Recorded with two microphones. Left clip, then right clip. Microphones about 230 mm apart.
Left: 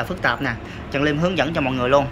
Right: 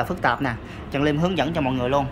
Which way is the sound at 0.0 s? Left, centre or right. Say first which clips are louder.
Left 1 dB; centre.